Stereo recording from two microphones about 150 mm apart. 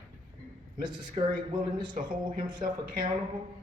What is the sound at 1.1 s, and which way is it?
A man's voice, 30° right (ahead or behind).